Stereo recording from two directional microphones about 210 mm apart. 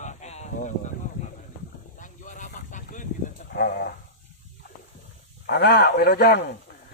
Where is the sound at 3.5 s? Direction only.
45° left (ahead or behind).